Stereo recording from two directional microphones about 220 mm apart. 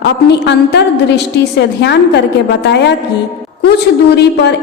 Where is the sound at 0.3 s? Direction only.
50° left (ahead or behind).